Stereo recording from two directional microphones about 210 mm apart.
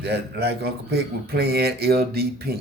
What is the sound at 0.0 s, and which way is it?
Speech, 50° right (ahead or behind).